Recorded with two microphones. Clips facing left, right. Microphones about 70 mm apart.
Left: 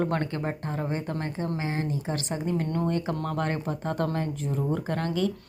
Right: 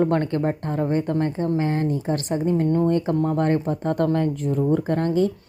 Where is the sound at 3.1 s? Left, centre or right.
Right.